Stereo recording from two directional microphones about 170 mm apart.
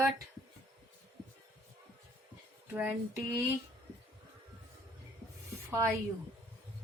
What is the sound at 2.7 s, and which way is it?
Speech, 10° right (ahead or behind).